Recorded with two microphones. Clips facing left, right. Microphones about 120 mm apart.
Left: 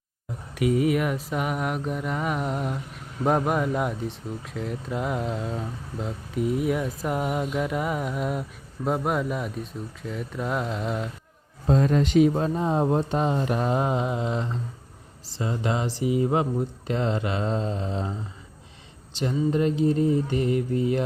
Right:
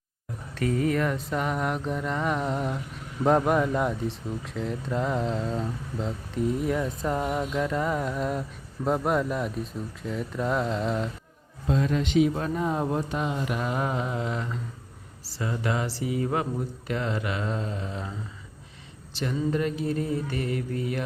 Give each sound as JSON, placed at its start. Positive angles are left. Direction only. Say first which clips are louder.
{"t": 0.5, "sound": "mantra", "louder": "left 3 dB", "side_deg": 10}
{"t": 3.2, "sound": "speech", "louder": "right 1 dB", "side_deg": 5}
{"t": 11.6, "sound": "a man's voice", "louder": "left 4 dB", "side_deg": 40}
{"t": 12.3, "sound": "speech", "louder": "left 3 dB", "side_deg": 25}
{"t": 19.2, "sound": "speech", "louder": "left 3 dB", "side_deg": 25}